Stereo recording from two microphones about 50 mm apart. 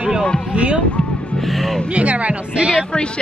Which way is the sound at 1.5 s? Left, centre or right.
Centre.